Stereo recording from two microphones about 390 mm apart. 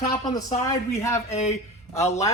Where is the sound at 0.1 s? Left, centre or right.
Centre.